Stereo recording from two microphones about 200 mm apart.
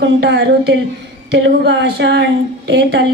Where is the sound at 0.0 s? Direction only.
60° right (ahead or behind).